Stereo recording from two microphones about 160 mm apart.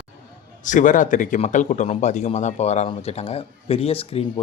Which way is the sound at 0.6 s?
55° left (ahead or behind).